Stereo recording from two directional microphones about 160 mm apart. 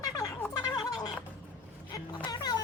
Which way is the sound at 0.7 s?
25° left (ahead or behind).